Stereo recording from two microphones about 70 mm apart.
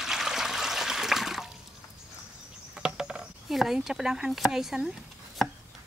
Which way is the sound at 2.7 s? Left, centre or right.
Centre.